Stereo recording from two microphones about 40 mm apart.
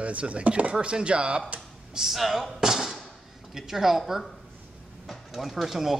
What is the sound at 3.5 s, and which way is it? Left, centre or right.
Speech, centre.